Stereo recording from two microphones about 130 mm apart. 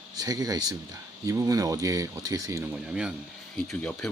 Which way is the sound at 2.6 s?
5° right (ahead or behind).